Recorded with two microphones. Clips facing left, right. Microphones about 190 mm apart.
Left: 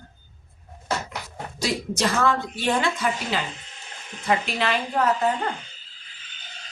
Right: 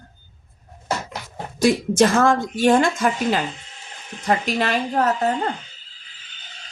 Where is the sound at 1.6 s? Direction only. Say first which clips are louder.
Right 9 dB; 50° right (ahead or behind).